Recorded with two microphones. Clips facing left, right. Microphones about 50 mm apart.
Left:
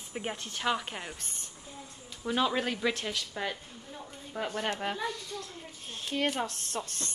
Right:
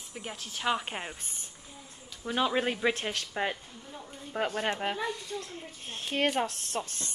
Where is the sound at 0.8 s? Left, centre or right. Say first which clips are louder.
Right 2 dB; right.